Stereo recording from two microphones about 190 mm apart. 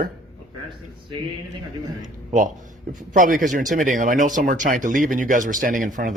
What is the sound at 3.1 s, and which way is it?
Speech, 45° right (ahead or behind).